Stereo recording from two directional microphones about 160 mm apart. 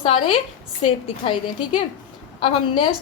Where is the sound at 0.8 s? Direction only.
40° left (ahead or behind).